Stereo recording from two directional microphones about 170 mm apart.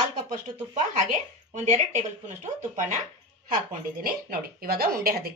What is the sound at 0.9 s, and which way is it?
Speech, 45° right (ahead or behind).